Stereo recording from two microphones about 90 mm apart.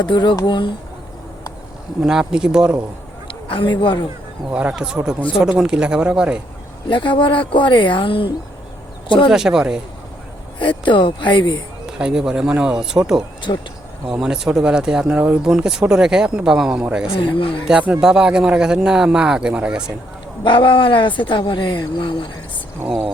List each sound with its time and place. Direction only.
0.0 s speech: 60° left (ahead or behind)
2.0 s a man's voice: 5° right (ahead or behind)
3.2 s a man's voice: 70° left (ahead or behind)
4.5 s a man's voice: 10° right (ahead or behind)
6.8 s speech: 65° left (ahead or behind)
9.3 s a man's voice: 5° right (ahead or behind)
10.6 s speech: 65° left (ahead or behind)
11.9 s a man's voice: 10° right (ahead or behind)
13.5 s speech: 90° left
14.1 s a man's voice: 5° right (ahead or behind)
17.1 s speech: 75° left (ahead or behind)
17.7 s a man's voice: 15° right (ahead or behind)
20.4 s speech: 65° left (ahead or behind)